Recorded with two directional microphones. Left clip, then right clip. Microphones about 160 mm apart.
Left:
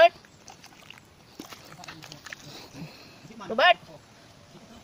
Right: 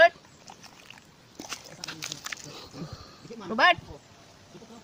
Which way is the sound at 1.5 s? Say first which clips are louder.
Right 7 dB; 90° right.